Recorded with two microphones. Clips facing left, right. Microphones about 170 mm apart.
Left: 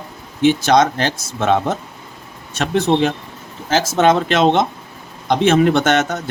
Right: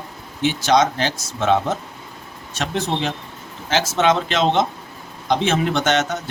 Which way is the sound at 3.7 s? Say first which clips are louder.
Left 4 dB; 45° left (ahead or behind).